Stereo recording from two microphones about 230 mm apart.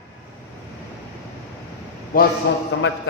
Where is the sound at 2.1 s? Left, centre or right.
Left.